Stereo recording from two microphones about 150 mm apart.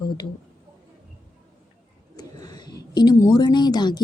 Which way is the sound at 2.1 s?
25° left (ahead or behind).